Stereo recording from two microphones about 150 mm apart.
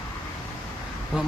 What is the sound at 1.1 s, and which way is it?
Speech, centre (ahead or behind).